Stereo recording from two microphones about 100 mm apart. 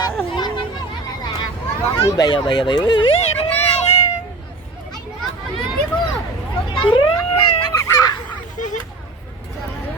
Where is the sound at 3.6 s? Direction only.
90° left.